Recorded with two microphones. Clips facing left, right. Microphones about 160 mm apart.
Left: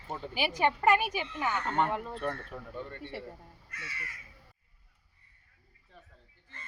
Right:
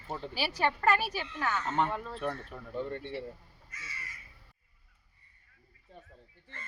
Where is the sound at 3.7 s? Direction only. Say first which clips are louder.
Left 3 dB; 65° left (ahead or behind).